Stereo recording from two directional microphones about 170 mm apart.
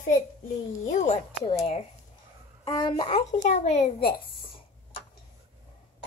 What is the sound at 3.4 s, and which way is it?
Speech, 40° left (ahead or behind).